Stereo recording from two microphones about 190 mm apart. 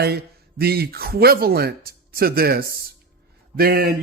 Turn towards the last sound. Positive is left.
turn(degrees=-50)  # may be behind; listen again after turning